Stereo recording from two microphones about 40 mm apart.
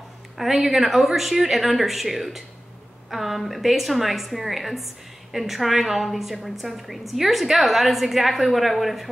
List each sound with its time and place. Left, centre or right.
0.4 s a woman's voice: centre